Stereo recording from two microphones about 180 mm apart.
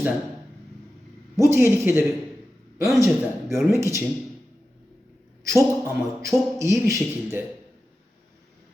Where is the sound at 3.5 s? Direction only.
15° right (ahead or behind).